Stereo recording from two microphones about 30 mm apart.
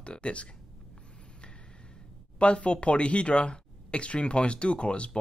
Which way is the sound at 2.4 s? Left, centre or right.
Left.